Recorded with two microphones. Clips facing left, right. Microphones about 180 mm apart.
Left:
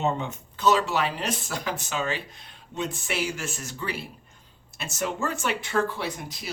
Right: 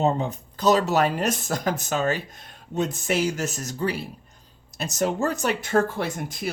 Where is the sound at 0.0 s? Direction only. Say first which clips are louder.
Right 4 dB; 35° right (ahead or behind).